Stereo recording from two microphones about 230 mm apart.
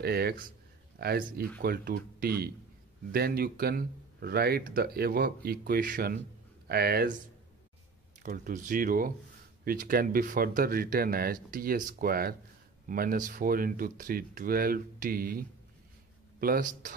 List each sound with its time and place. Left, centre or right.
0.0 s speech: right
8.2 s speech: right